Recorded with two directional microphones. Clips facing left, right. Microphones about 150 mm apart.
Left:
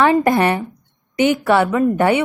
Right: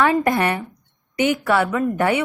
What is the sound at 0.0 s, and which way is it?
Speech, 30° left (ahead or behind).